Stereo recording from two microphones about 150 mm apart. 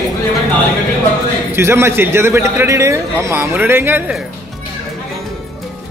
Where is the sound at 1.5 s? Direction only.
15° right (ahead or behind).